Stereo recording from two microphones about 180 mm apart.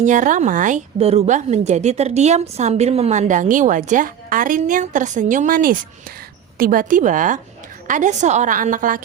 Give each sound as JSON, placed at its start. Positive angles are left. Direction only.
{"t": 0.0, "sound": "a woman's voice", "side_deg": -45}